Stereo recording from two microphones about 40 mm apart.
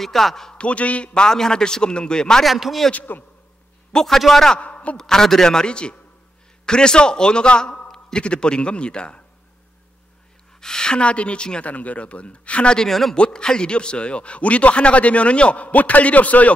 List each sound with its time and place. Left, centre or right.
0.0 s a man's voice: centre
0.6 s a man's voice: left
2.4 s speech: centre
2.9 s speech: left
3.9 s a man's voice: centre
4.6 s a sound: left
4.9 s a man's voice: centre
10.6 s a man's voice: centre
11.6 s a man's voice: left
12.7 s a man's voice: centre
13.1 s a man's voice: left